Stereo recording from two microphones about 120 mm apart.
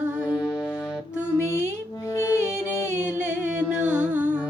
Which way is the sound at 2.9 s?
15° right (ahead or behind).